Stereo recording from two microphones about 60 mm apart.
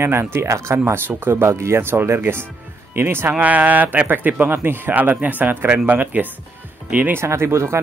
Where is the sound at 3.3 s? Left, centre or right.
Right.